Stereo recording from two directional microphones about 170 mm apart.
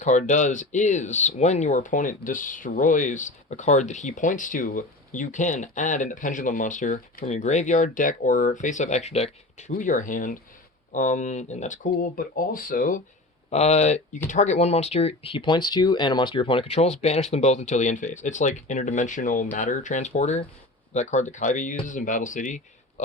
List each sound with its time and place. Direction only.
0.0 s speech: 45° left (ahead or behind)
13.5 s speech: 40° left (ahead or behind)